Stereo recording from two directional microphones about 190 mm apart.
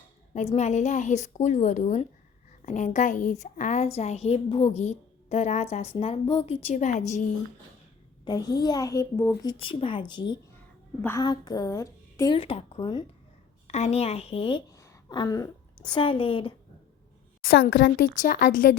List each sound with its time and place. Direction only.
0.3 s a woman's voice: 35° left (ahead or behind)
8.2 s a woman's voice: 20° left (ahead or behind)
17.4 s a woman's voice: 50° left (ahead or behind)